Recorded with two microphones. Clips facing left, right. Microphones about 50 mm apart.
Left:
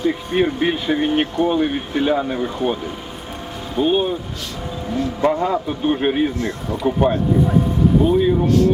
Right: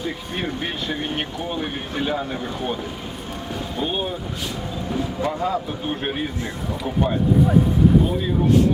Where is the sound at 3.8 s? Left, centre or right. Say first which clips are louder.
Left 9 dB; centre.